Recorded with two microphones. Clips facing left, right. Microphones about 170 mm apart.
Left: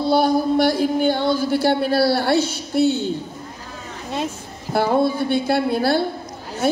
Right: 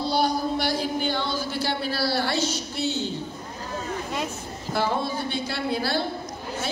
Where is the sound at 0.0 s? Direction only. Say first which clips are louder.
Left 7 dB; 55° left (ahead or behind).